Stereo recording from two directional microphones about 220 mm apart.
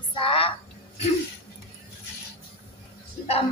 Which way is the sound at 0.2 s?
25° left (ahead or behind).